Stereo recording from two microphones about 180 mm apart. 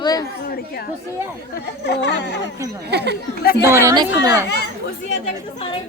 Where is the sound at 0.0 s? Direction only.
20° left (ahead or behind).